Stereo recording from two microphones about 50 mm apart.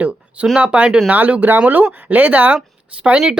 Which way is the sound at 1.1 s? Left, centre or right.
Right.